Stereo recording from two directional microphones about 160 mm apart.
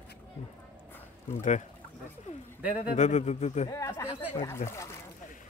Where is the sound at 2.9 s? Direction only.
45° left (ahead or behind).